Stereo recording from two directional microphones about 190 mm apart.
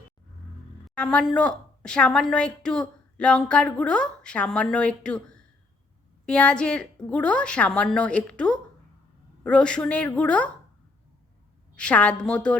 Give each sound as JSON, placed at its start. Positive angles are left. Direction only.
{"t": 0.9, "sound": "a woman's voice", "side_deg": 5}
{"t": 11.8, "sound": "a woman's voice", "side_deg": 5}